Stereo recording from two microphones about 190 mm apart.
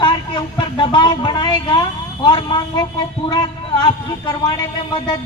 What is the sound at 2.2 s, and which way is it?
A man's voice, 25° left (ahead or behind).